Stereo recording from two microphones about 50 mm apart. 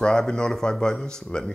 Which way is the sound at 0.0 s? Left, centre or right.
Centre.